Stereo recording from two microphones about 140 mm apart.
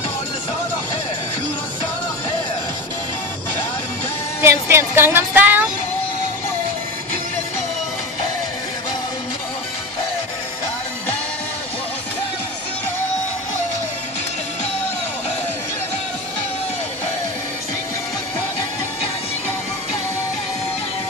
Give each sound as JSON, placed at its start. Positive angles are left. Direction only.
{"t": 4.4, "sound": "speech", "side_deg": -20}